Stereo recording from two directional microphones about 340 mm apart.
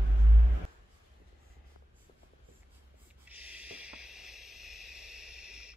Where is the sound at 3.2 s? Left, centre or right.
Centre.